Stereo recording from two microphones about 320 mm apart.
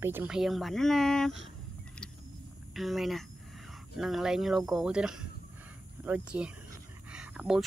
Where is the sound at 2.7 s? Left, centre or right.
Centre.